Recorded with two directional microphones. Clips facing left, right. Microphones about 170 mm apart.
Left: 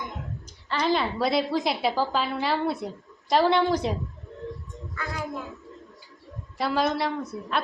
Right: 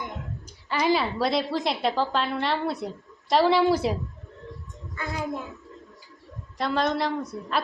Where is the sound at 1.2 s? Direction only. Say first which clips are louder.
Left 1 dB; centre (ahead or behind).